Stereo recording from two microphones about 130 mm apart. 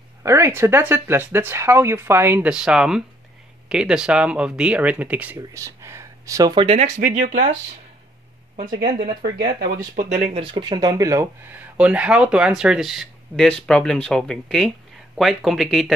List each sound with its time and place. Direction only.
0.2 s speech: 20° right (ahead or behind)
2.5 s speech: 5° right (ahead or behind)
5.5 s a sound: 20° right (ahead or behind)
6.5 s speech: 45° right (ahead or behind)
7.0 s speech: 85° right
9.4 s speech: 85° right; by 10.5 s 50° right (ahead or behind)
10.5 s speech: 35° right (ahead or behind)
11.7 s speech: 10° right (ahead or behind)